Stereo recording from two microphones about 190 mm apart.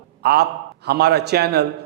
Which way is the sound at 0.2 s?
60° right (ahead or behind).